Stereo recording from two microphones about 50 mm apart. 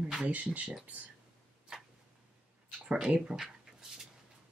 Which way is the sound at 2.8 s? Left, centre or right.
Centre.